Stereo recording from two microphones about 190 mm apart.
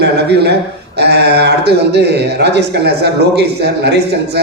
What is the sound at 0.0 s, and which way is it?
A man's voice, 60° right (ahead or behind).